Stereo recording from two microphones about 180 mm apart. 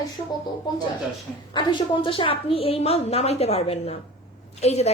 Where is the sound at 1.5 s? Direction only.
25° left (ahead or behind).